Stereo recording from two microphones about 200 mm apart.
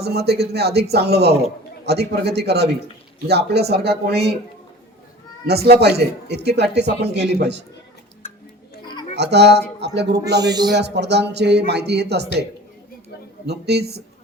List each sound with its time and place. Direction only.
0.0 s speech: 55° right (ahead or behind)
5.6 s speech: 55° right (ahead or behind)
9.1 s speech: 55° right (ahead or behind)
13.5 s speech: 55° right (ahead or behind)